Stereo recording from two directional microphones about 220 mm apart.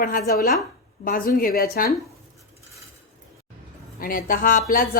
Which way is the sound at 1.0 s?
40° left (ahead or behind).